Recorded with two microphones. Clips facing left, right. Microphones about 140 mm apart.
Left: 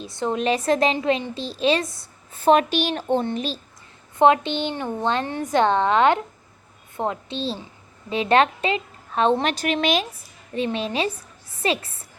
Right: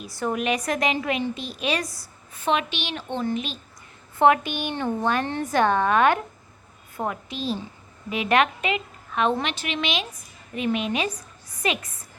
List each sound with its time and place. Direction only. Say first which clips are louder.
0.0 s a woman's voice: left 3 dB; 20° left (ahead or behind)
4.2 s a woman's voice: left 2 dB; 25° left (ahead or behind)
9.5 s a woman's voice: left 7 dB; 40° left (ahead or behind)
10.5 s a woman's voice: left 1 dB; 30° left (ahead or behind)